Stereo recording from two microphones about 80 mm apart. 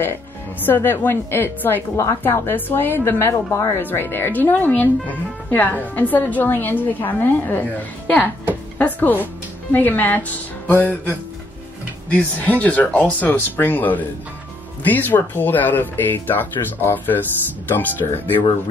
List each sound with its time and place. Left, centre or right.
0.0 s a woman's voice: left
8.7 s a woman's voice: left
12.1 s a woman's voice: centre